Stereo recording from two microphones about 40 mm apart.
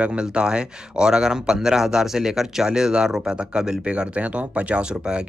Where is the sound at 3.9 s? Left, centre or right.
Right.